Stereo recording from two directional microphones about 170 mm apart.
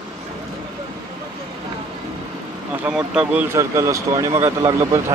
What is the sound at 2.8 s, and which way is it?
Speech, 5° right (ahead or behind).